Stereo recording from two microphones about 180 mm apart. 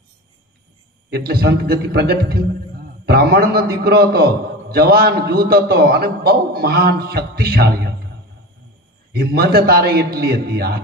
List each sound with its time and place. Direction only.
1.1 s a man's voice: 60° right (ahead or behind)
9.1 s a man's voice: 60° right (ahead or behind)